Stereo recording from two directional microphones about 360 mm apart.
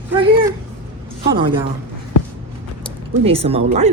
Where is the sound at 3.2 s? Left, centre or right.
Centre.